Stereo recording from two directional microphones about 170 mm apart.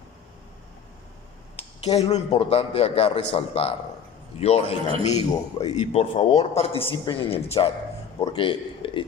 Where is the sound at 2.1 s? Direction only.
35° left (ahead or behind).